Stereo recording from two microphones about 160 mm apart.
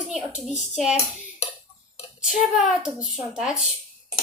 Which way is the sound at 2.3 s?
5° right (ahead or behind).